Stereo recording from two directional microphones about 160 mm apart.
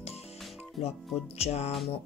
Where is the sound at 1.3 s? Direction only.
40° left (ahead or behind).